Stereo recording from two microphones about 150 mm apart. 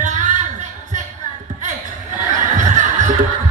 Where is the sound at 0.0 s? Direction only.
55° right (ahead or behind).